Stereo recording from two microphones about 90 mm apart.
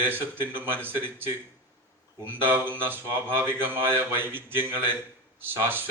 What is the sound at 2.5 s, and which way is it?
Speech, 25° right (ahead or behind).